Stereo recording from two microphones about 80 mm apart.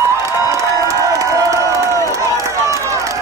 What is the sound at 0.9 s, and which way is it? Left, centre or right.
Crowd, right.